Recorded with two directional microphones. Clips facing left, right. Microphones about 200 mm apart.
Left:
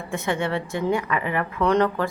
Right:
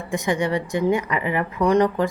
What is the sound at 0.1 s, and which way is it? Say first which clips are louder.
A woman's voice: right 3 dB; 15° right (ahead or behind).